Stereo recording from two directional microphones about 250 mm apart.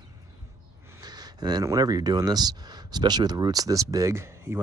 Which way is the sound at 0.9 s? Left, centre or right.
Centre.